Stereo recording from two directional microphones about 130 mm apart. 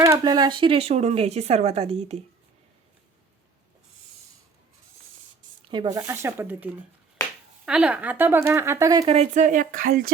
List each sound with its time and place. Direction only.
0.0 s speech: 30° right (ahead or behind); by 2.2 s 55° right (ahead or behind)
5.7 s speech: 35° right (ahead or behind)
6.0 s a woman's voice: 20° right (ahead or behind)
9.3 s speech: 75° right (ahead or behind)